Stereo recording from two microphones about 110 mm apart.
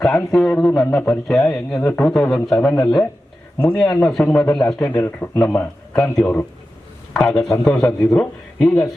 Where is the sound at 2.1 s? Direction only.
5° left (ahead or behind).